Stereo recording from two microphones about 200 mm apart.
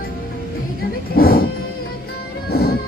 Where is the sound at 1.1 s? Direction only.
50° left (ahead or behind).